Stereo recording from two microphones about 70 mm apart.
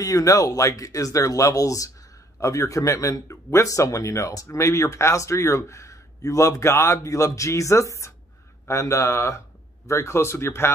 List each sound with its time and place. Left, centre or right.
0.0 s speech: left